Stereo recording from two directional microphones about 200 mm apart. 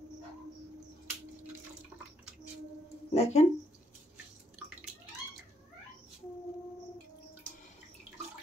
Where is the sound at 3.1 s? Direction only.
30° left (ahead or behind).